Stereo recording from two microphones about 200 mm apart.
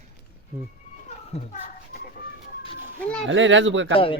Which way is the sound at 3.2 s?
70° right (ahead or behind).